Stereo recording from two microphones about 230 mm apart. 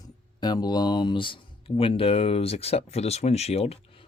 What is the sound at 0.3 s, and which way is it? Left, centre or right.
Speech, centre.